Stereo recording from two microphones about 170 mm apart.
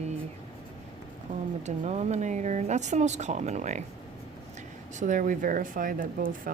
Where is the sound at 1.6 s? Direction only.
40° right (ahead or behind).